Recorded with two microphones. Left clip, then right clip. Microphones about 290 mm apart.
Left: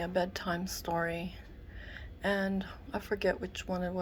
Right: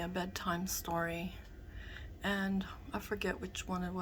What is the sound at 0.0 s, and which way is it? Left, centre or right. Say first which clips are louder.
A woman's voice: left 6 dB; centre.